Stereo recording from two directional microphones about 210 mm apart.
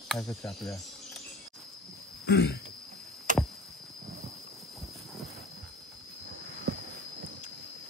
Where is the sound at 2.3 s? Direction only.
50° left (ahead or behind).